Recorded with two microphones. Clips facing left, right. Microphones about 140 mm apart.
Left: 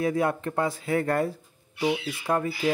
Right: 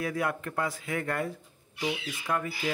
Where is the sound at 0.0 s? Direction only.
25° left (ahead or behind).